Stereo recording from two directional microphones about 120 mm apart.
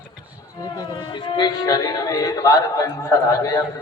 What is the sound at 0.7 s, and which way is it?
Speech, 35° left (ahead or behind).